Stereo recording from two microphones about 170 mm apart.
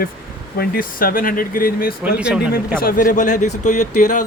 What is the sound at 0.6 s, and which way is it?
Speech, 60° left (ahead or behind).